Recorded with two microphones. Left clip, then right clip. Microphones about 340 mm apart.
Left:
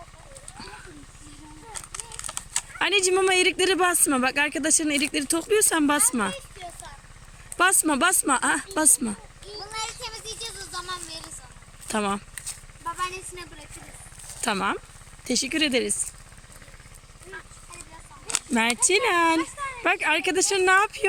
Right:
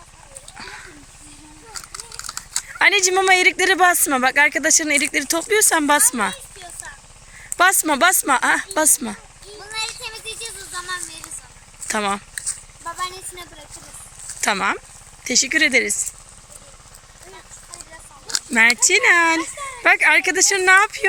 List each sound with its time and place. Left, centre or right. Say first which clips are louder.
0.5 s a sound: right 6 dB; centre
1.7 s speech: right 5 dB; centre
7.5 s speech: right 5 dB; centre
10.7 s music: right 7 dB; centre
11.9 s speech: right 5 dB; centre
14.4 s speech: right 6 dB; centre
18.3 s speech: right 9 dB; centre